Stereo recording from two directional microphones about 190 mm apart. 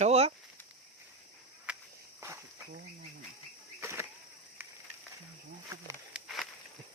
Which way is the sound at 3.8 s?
10° right (ahead or behind).